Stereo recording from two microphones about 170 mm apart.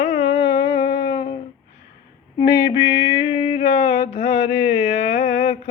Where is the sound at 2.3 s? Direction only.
25° left (ahead or behind).